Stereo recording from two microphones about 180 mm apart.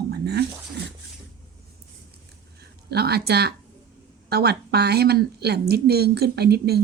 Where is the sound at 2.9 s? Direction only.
65° right (ahead or behind).